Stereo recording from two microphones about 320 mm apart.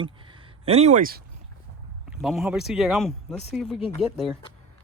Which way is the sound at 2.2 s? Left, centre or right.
Centre.